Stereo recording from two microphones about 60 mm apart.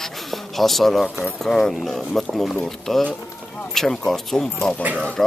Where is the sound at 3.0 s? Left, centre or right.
Left.